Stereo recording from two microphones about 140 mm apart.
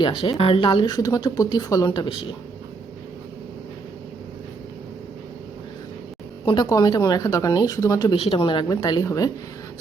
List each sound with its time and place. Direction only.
0.0 s speech: 40° left (ahead or behind)
6.4 s speech: 35° left (ahead or behind)
8.1 s speech: 40° left (ahead or behind)
8.6 s speech: 30° left (ahead or behind)